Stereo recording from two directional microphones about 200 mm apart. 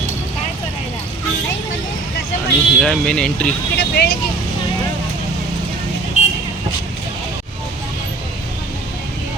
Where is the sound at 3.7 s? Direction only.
55° left (ahead or behind).